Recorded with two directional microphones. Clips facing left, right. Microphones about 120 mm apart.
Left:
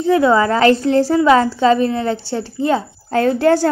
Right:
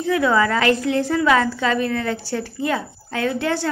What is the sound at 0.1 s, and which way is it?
A woman's voice, 30° left (ahead or behind).